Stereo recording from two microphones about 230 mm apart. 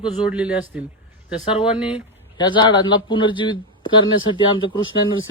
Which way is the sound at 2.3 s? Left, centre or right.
Centre.